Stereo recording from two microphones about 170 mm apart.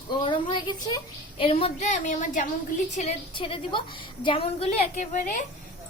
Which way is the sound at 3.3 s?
30° left (ahead or behind).